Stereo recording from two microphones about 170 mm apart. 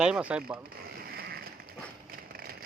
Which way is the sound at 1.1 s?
65° right (ahead or behind).